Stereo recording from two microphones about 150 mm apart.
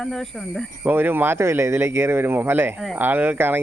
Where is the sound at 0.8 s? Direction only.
15° right (ahead or behind).